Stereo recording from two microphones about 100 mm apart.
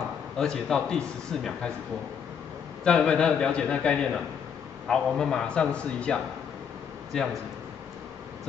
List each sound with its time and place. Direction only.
0.4 s a man's voice: 5° left (ahead or behind)
2.8 s a man's voice: 10° left (ahead or behind)